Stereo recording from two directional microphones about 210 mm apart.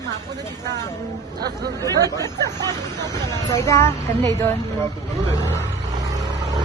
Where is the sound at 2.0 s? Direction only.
15° right (ahead or behind).